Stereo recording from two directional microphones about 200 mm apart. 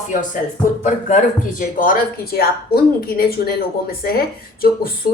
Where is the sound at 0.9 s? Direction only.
40° left (ahead or behind).